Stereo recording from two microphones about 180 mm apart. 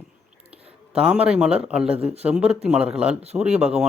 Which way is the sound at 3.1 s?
35° right (ahead or behind).